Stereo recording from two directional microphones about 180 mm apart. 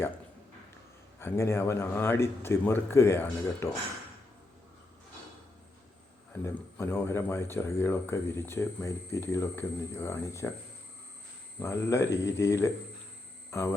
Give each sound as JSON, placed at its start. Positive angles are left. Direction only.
{"t": 1.2, "sound": "speech", "side_deg": 15}
{"t": 6.4, "sound": "speech", "side_deg": 15}
{"t": 11.6, "sound": "speech", "side_deg": 15}